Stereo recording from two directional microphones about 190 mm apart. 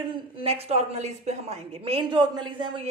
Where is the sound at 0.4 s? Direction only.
30° right (ahead or behind).